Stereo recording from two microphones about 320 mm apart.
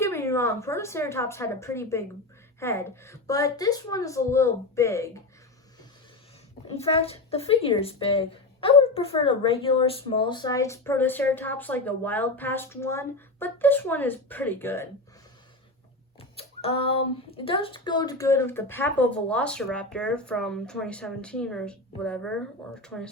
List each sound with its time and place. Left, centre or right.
0.0 s speech: centre
6.7 s speech: centre
16.4 s speech: centre